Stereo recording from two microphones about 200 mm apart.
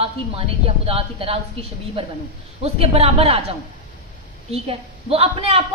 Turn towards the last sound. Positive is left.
turn(degrees=-30)  # may be behind; listen again after turning